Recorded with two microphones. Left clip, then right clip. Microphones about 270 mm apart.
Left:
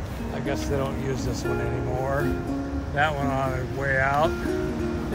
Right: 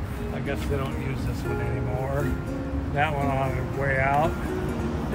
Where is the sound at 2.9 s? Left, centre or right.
Left.